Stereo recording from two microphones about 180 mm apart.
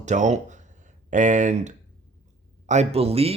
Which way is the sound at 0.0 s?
40° right (ahead or behind).